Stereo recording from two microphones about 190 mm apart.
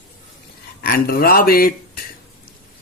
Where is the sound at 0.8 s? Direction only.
50° left (ahead or behind).